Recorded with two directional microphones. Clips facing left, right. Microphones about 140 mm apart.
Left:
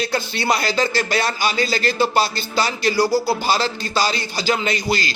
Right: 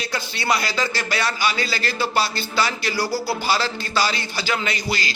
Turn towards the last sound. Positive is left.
turn(degrees=40)  # may be behind; listen again after turning